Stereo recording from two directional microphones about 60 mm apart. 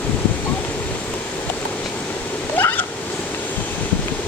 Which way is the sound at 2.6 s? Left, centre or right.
Left.